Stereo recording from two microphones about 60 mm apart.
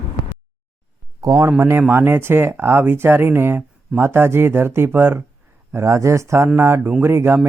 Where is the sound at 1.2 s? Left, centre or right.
Right.